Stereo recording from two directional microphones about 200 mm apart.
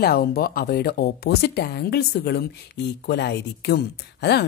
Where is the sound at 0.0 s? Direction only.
50° left (ahead or behind).